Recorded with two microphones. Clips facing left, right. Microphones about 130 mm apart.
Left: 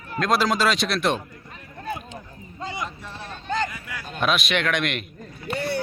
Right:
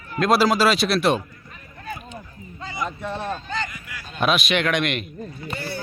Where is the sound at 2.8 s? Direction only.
60° right (ahead or behind).